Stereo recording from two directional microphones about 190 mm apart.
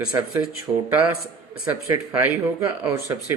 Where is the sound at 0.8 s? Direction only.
10° right (ahead or behind).